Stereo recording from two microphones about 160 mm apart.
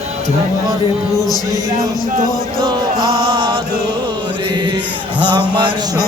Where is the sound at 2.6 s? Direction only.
25° right (ahead or behind).